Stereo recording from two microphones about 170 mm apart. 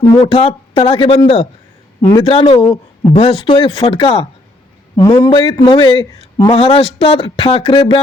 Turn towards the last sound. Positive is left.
turn(degrees=35)  # may be behind; listen again after turning